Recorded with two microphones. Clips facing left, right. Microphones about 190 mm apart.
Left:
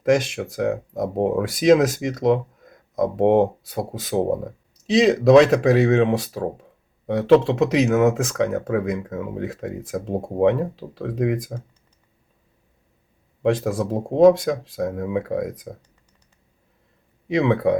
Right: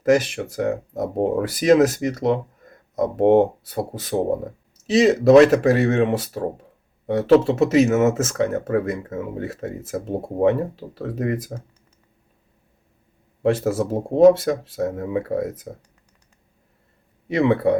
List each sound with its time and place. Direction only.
0.0 s speech: centre (ahead or behind)
13.4 s speech: 5° right (ahead or behind)
17.2 s speech: 5° right (ahead or behind)